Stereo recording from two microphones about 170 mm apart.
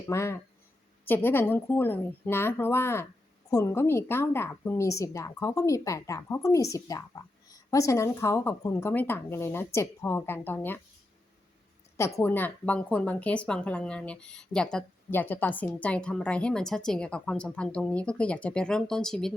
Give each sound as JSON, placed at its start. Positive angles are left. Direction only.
{"t": 0.1, "sound": "speech", "side_deg": 15}
{"t": 11.9, "sound": "speech", "side_deg": 15}